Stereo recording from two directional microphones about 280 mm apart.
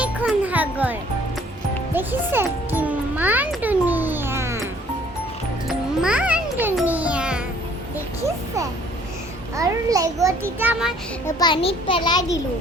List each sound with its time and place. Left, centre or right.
0.0 s music: centre
5.6 s music: centre
9.6 s a sound: centre
10.6 s child singing: centre
11.3 s a child's voice: centre